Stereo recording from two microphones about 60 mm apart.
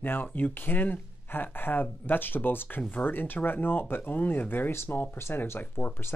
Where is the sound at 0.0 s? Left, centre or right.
Left.